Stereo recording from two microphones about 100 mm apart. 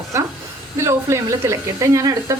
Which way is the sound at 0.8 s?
25° right (ahead or behind).